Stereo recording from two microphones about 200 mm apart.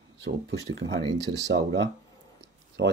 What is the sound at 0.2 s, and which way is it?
Speech, 60° right (ahead or behind).